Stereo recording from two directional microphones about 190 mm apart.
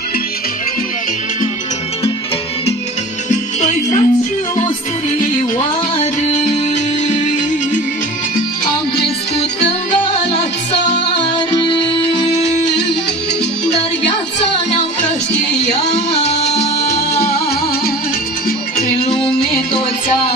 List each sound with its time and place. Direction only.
3.3 s music: 40° left (ahead or behind)
17.1 s music: 55° left (ahead or behind)